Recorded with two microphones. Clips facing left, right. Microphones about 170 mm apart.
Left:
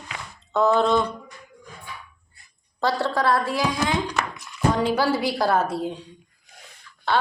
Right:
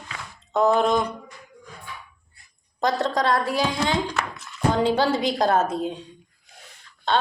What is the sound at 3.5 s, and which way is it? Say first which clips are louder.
A woman's voice: even; 25° right (ahead or behind).